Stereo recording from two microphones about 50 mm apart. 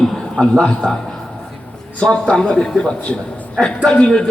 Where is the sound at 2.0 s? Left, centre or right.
Centre.